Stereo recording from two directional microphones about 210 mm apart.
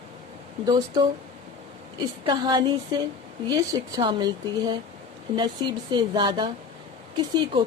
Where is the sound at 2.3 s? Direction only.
20° right (ahead or behind).